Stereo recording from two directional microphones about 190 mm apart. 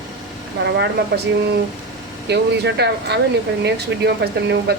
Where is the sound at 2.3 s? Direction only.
60° right (ahead or behind).